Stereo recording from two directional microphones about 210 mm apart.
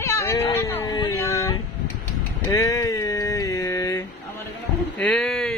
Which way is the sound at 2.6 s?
15° left (ahead or behind).